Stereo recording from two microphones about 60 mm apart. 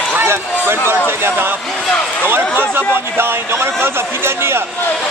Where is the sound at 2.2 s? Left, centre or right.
Right.